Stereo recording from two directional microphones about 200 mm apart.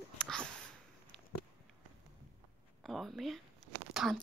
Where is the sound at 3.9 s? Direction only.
Centre (ahead or behind).